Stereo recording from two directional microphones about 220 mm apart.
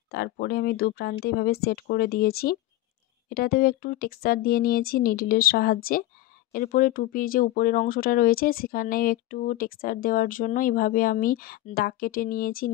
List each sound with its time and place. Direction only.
0.1 s speech: 45° left (ahead or behind)